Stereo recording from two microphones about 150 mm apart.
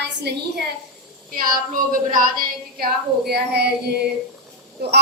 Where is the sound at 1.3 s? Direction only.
70° right (ahead or behind).